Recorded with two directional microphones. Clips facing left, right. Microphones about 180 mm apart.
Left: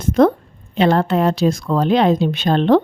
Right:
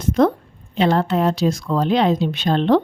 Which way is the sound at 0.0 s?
55° left (ahead or behind).